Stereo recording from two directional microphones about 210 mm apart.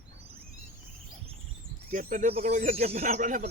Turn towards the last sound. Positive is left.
turn(degrees=-35)  # may be behind; listen again after turning